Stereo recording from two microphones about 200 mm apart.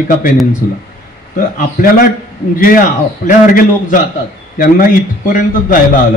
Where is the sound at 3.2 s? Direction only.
40° left (ahead or behind).